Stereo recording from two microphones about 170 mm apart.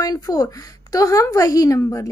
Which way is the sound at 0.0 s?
20° left (ahead or behind).